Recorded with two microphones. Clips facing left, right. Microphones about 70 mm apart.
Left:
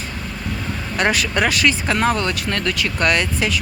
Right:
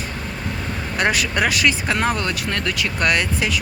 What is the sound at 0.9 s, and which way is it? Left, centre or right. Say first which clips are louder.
Speech: left 1 dB; centre.